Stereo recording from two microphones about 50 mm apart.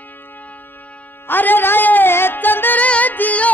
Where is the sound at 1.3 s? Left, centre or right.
Left.